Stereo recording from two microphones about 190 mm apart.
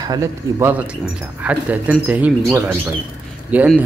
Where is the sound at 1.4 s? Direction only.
5° right (ahead or behind).